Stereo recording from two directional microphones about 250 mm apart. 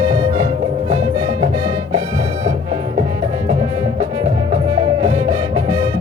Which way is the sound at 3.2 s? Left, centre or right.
Centre.